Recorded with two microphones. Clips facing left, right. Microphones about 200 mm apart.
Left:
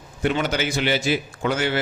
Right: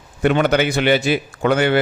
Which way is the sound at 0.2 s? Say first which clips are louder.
Right 7 dB; 60° right (ahead or behind).